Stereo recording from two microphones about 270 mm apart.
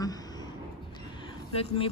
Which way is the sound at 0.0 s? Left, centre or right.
Centre.